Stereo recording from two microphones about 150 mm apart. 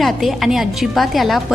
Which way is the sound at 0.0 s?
Centre (ahead or behind).